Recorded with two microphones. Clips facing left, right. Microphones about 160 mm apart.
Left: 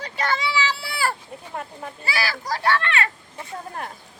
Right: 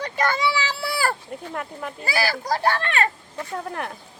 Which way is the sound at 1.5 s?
70° right (ahead or behind).